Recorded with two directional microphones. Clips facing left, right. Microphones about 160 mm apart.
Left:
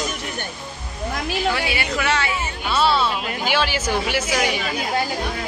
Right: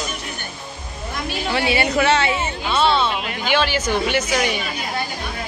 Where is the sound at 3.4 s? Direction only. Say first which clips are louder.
Right 2 dB; 10° left (ahead or behind).